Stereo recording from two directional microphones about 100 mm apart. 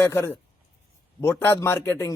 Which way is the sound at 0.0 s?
20° left (ahead or behind).